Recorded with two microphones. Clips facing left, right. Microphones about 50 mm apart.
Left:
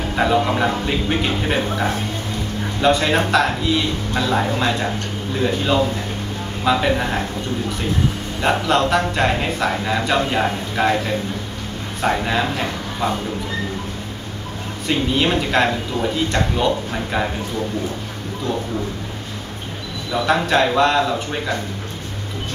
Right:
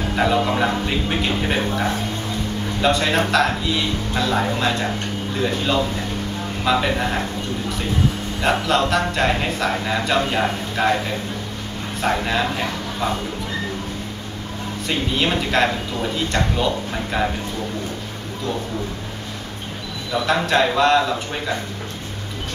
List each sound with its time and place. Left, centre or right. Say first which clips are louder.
0.1 s speech: left 1 dB; centre
8.4 s speech: left 1 dB; centre
14.9 s speech: left 3 dB; centre
20.1 s speech: left 2 dB; centre